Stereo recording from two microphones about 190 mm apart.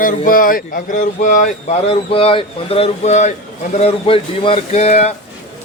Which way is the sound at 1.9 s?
30° left (ahead or behind).